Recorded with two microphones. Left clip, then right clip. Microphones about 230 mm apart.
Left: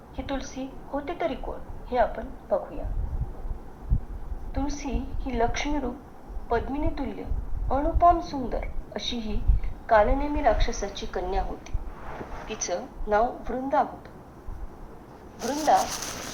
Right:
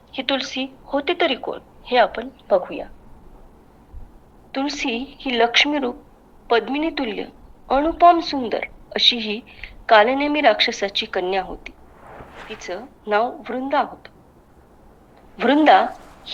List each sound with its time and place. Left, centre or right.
0.1 s a woman's voice: right
4.5 s a woman's voice: right
12.6 s a woman's voice: right
15.4 s a woman's voice: right